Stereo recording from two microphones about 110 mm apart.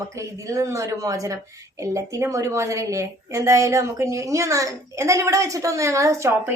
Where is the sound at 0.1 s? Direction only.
30° right (ahead or behind).